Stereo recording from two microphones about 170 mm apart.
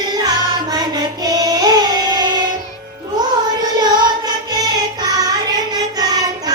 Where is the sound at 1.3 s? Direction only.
25° right (ahead or behind).